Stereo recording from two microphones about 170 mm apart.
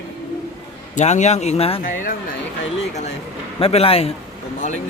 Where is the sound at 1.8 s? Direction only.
50° left (ahead or behind).